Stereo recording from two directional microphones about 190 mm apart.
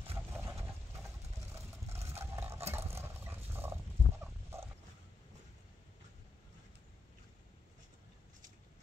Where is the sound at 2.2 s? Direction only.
15° right (ahead or behind).